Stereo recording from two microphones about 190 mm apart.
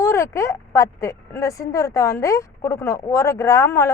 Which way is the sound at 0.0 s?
15° left (ahead or behind).